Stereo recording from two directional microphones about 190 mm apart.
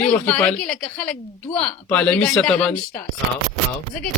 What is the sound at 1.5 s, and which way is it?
Speech, 30° left (ahead or behind).